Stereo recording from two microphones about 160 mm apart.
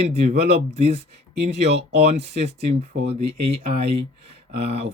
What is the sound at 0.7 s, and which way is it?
Speech, 40° right (ahead or behind).